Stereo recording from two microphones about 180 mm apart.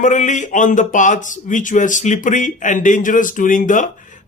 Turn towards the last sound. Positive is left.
turn(degrees=45)  # may be behind; listen again after turning